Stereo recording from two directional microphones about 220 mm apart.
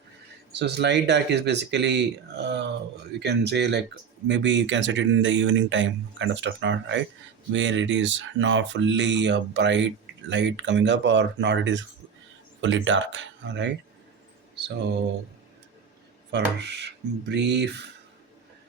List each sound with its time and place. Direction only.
0.5 s speech: 50° right (ahead or behind)
16.3 s speech: 50° right (ahead or behind)